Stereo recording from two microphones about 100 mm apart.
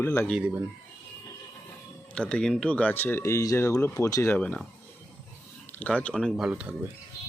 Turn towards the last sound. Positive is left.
turn(degrees=-10)  # may be behind; listen again after turning